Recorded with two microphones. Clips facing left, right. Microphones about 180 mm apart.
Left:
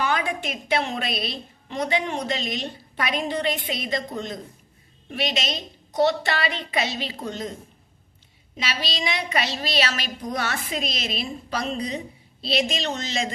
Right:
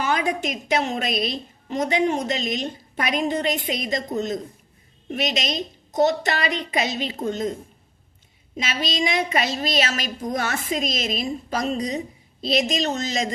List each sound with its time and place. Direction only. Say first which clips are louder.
0.0 s a woman's voice: right 2 dB; 40° right (ahead or behind)
8.5 s a woman's voice: right 4 dB; 45° right (ahead or behind)